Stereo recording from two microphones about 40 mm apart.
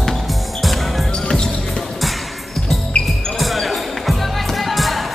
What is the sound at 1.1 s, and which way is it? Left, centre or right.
Music, centre.